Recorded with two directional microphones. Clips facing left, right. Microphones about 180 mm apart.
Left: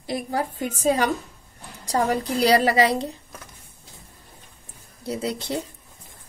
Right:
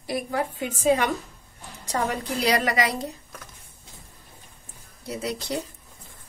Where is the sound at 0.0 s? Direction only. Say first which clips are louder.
Left 1 dB; 30° left (ahead or behind).